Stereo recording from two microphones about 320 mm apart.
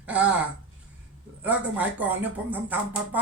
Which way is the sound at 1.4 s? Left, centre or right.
Centre.